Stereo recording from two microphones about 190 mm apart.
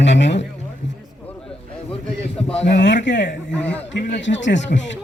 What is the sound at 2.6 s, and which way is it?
A man's voice, 65° left (ahead or behind).